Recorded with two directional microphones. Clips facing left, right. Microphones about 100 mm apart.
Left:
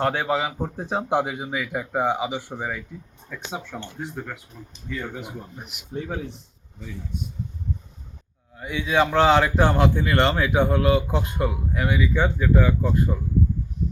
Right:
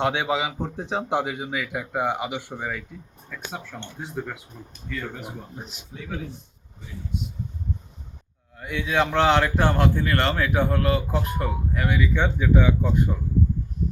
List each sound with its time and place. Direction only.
0.0 s speech: centre (ahead or behind)
3.8 s speech: centre (ahead or behind)
4.9 s speech: 5° left (ahead or behind)
5.5 s speech: 30° right (ahead or behind)
8.5 s speech: 15° left (ahead or behind)